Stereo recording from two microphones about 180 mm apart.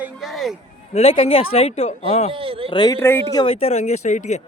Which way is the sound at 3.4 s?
30° left (ahead or behind).